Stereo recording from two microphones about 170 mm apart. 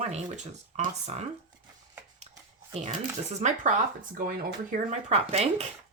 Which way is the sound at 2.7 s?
40° right (ahead or behind).